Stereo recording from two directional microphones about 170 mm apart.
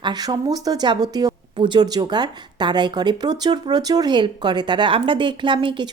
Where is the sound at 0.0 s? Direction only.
25° right (ahead or behind).